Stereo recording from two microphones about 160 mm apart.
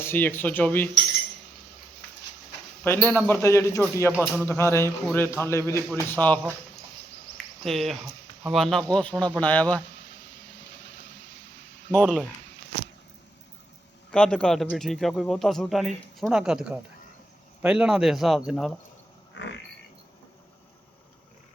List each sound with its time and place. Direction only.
0.0 s speech: 15° left (ahead or behind)
2.8 s speech: 15° left (ahead or behind)
4.1 s speech: 5° right (ahead or behind)
4.4 s speech: 15° left (ahead or behind)
7.3 s cricket: centre (ahead or behind)
8.4 s speech: centre (ahead or behind)
11.9 s speech: 5° right (ahead or behind)
14.1 s speech: 5° left (ahead or behind)